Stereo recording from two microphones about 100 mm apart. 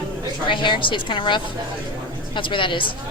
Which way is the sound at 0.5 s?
55° left (ahead or behind).